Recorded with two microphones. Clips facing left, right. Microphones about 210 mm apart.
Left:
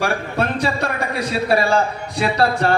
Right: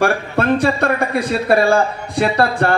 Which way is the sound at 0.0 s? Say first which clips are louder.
Right 4 dB; 55° right (ahead or behind).